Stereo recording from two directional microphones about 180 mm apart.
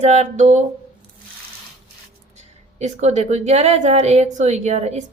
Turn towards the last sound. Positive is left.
turn(degrees=-40)  # may be behind; listen again after turning